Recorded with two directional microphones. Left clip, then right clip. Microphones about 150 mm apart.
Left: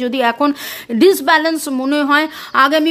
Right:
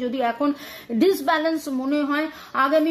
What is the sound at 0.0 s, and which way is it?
A woman's voice, 55° left (ahead or behind).